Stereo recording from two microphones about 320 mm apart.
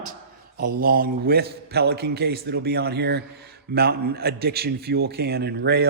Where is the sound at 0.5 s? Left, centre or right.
Right.